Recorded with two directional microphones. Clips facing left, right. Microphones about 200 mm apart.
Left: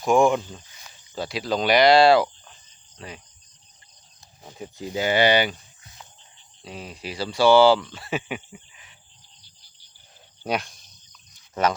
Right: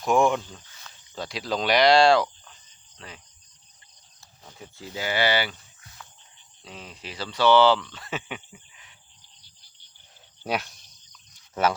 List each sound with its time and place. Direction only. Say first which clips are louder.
0.0 s speech: left 3 dB; centre (ahead or behind)
4.4 s speech: left 7 dB; 20° left (ahead or behind)
10.4 s speech: left 2 dB; 5° right (ahead or behind)